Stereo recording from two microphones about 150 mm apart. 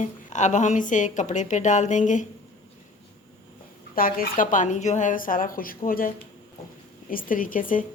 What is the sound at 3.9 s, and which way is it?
A woman's voice, 75° left (ahead or behind).